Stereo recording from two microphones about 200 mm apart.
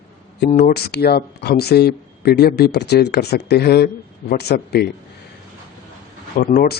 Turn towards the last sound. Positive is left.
turn(degrees=45)  # may be behind; listen again after turning